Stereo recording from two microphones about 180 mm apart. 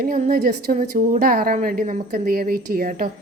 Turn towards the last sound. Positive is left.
turn(degrees=-50)  # may be behind; listen again after turning